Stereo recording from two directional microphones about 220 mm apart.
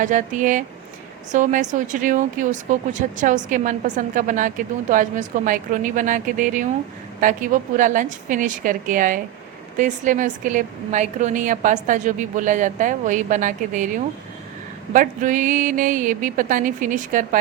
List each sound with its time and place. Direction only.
0.0 s a woman's voice: 35° right (ahead or behind)